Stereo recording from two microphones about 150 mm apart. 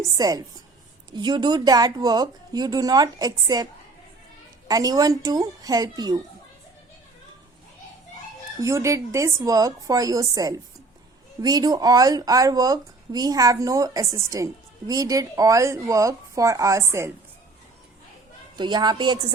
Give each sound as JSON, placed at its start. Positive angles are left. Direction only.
{"t": 0.2, "sound": "speech", "side_deg": -25}
{"t": 4.7, "sound": "speech", "side_deg": -25}
{"t": 8.6, "sound": "speech", "side_deg": -20}
{"t": 18.5, "sound": "speech", "side_deg": -30}